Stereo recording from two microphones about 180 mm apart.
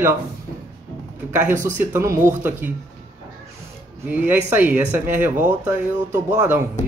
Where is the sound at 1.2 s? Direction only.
10° right (ahead or behind).